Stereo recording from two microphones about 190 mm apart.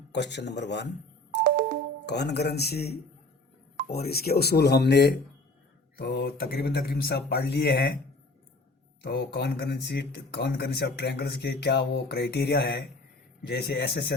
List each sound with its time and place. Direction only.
0.1 s speech: 65° left (ahead or behind)
1.5 s music: 50° right (ahead or behind)
2.0 s speech: 60° left (ahead or behind)
9.0 s speech: 60° left (ahead or behind)